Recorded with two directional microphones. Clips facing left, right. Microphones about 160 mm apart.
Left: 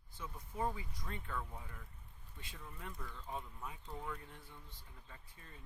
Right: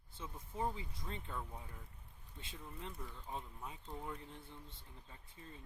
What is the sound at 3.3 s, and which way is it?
Speech, 25° right (ahead or behind).